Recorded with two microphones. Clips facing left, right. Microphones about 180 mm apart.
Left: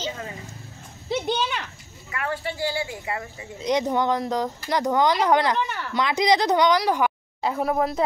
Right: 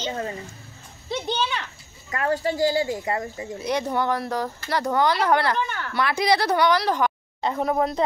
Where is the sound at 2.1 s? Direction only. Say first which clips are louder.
Right 6 dB; 40° right (ahead or behind).